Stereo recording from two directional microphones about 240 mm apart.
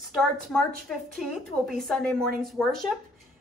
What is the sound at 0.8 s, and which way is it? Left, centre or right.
A woman's voice, centre.